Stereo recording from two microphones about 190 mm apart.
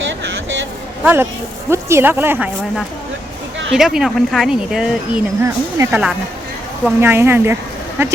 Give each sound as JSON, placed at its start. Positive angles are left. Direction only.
{"t": 0.0, "sound": "vehicle", "side_deg": -75}
{"t": 1.0, "sound": "speech", "side_deg": -10}
{"t": 3.7, "sound": "speech", "side_deg": 0}